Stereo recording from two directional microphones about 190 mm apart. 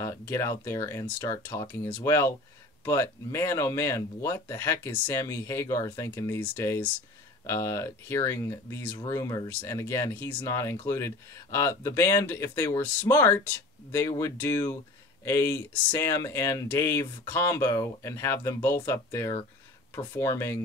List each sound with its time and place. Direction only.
0.0 s speech: 15° left (ahead or behind)